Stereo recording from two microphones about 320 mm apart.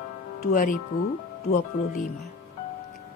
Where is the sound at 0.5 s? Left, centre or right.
Left.